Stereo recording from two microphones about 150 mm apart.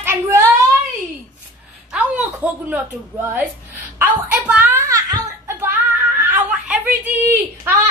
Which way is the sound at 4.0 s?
10° right (ahead or behind).